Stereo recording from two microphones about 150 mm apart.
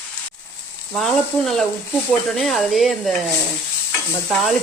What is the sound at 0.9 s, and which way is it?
Stir, centre (ahead or behind).